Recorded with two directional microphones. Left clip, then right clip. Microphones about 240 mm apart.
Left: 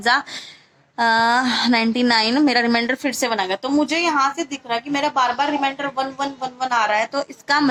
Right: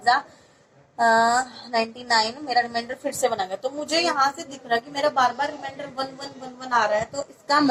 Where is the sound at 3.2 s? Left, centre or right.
Left.